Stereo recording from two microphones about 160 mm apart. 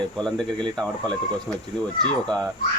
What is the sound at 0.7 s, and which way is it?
Speech, 5° left (ahead or behind).